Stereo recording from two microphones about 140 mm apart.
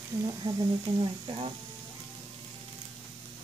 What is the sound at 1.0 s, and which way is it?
Speech, 35° right (ahead or behind).